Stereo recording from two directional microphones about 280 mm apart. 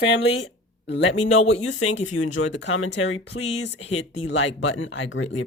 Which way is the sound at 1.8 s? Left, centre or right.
Left.